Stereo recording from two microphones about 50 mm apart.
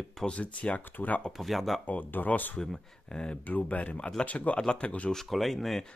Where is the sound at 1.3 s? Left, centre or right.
Centre.